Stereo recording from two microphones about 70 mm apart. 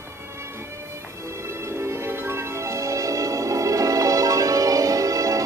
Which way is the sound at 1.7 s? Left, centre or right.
Right.